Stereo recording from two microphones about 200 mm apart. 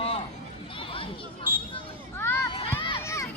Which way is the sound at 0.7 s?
25° left (ahead or behind).